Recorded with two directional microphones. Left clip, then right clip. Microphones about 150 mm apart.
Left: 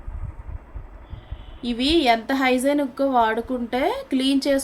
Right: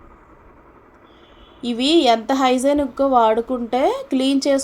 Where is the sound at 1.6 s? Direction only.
15° right (ahead or behind).